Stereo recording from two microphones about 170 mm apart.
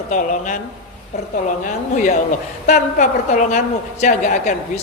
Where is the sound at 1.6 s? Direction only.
50° left (ahead or behind).